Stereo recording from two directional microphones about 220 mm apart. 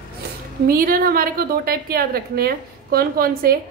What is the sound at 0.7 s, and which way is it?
A woman's voice, 40° right (ahead or behind).